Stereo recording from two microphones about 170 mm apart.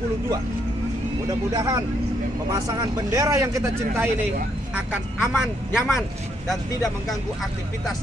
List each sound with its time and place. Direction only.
1.5 s speech: 20° right (ahead or behind); by 6.6 s centre (ahead or behind)